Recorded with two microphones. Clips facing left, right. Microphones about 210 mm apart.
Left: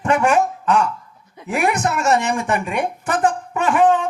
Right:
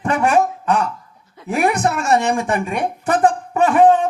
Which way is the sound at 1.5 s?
35° right (ahead or behind).